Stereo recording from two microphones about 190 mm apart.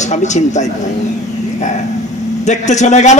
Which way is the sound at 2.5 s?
40° left (ahead or behind).